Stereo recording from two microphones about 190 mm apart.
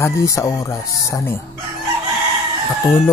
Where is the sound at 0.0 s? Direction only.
15° left (ahead or behind).